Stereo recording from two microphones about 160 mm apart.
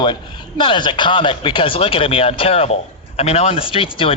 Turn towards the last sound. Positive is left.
turn(degrees=35)  # may be behind; listen again after turning